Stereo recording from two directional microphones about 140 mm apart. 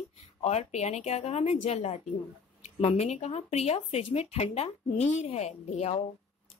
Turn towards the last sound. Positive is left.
turn(degrees=50)  # may be behind; listen again after turning